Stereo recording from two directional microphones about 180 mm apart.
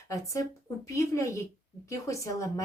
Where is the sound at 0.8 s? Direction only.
15° left (ahead or behind).